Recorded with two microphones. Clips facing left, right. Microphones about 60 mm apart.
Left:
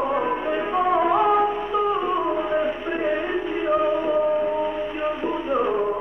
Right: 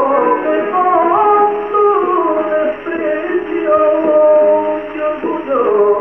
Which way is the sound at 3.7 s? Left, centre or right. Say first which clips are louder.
Right 11 dB; right.